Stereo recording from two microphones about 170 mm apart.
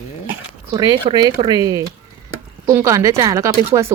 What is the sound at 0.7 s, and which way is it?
Speech, 25° right (ahead or behind).